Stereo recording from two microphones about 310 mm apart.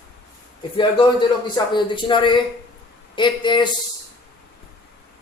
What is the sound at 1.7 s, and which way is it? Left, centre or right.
Speech, centre.